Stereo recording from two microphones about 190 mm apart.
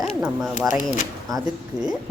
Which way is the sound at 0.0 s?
5° right (ahead or behind).